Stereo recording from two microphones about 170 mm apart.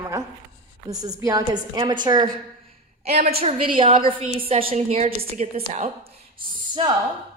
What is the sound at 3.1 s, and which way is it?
A woman's voice, 40° right (ahead or behind).